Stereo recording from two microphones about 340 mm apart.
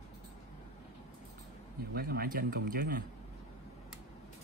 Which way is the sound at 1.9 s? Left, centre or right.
Right.